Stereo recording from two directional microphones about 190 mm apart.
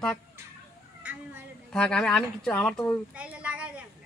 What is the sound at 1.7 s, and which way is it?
Speech, 5° left (ahead or behind).